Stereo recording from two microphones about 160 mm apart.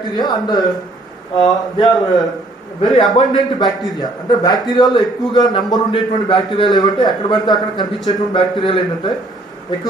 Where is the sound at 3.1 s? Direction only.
25° left (ahead or behind).